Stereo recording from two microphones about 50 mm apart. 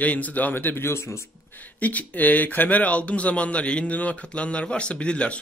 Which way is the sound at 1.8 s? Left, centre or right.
Left.